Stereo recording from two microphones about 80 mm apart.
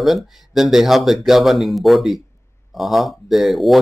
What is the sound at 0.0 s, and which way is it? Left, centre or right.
Speech, centre.